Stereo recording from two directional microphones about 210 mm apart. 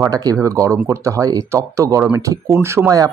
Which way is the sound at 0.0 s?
15° right (ahead or behind).